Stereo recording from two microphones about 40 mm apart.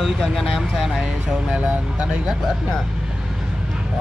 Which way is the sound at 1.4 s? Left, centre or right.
Right.